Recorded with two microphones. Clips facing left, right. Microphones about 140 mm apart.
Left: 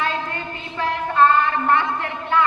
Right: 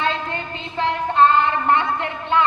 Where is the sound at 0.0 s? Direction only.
25° right (ahead or behind).